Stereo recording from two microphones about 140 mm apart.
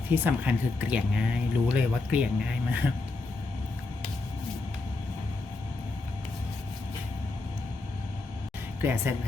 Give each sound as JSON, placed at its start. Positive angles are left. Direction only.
{"t": 0.1, "sound": "speech", "side_deg": -15}
{"t": 8.8, "sound": "speech", "side_deg": -15}